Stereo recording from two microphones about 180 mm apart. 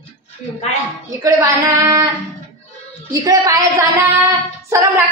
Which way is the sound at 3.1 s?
20° right (ahead or behind).